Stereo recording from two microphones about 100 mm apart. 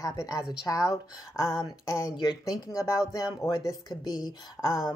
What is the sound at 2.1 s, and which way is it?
Speech, 40° left (ahead or behind).